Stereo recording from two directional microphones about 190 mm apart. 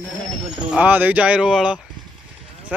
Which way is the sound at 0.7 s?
10° right (ahead or behind).